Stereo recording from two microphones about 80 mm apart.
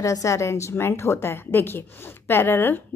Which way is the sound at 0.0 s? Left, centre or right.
Left.